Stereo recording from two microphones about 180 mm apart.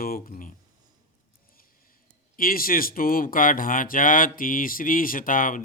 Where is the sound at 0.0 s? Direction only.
50° left (ahead or behind).